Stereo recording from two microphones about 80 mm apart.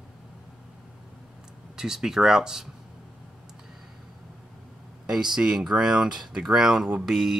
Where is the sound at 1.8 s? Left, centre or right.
Centre.